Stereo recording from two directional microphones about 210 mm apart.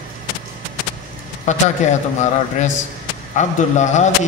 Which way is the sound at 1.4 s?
35° left (ahead or behind).